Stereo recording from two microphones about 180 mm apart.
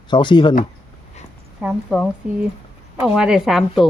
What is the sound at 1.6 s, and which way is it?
A woman's voice, centre (ahead or behind).